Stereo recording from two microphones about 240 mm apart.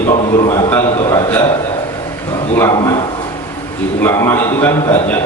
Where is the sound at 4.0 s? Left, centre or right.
Centre.